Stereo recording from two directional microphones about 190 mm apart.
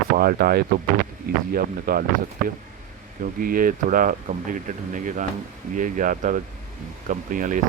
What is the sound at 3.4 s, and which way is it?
Speech, 45° right (ahead or behind).